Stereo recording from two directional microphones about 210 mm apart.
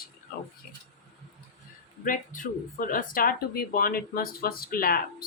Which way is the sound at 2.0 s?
40° left (ahead or behind).